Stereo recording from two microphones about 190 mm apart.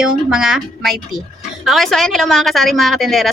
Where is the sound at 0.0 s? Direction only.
5° right (ahead or behind).